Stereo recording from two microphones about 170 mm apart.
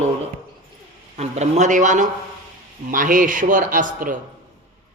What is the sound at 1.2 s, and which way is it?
Speech, 40° right (ahead or behind).